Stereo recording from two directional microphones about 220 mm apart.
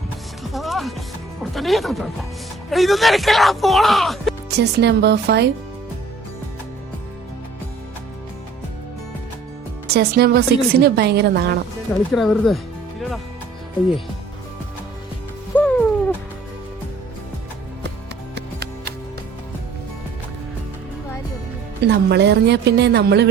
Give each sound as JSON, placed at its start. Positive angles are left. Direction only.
{"t": 0.4, "sound": "music", "side_deg": 0}
{"t": 2.6, "sound": "speech", "side_deg": 0}
{"t": 4.5, "sound": "a woman's voice", "side_deg": -50}
{"t": 9.8, "sound": "a woman's voice", "side_deg": -45}
{"t": 12.1, "sound": "speech", "side_deg": 0}
{"t": 15.5, "sound": "music", "side_deg": 5}
{"t": 18.3, "sound": "music", "side_deg": -50}
{"t": 21.8, "sound": "a woman's voice", "side_deg": -50}